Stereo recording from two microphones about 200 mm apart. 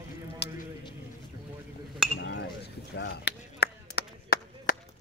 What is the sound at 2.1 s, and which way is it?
Chink, 65° left (ahead or behind).